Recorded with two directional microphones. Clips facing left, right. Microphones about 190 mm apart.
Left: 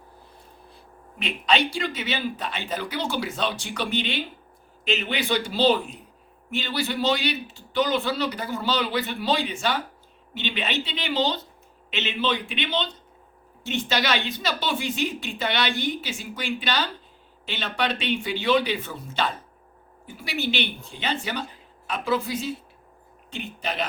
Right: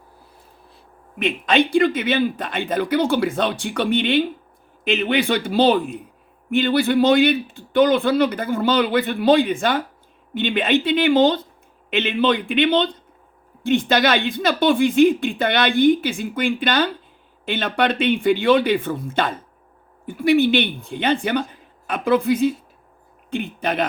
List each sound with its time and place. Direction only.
1.2 s speech: 50° right (ahead or behind)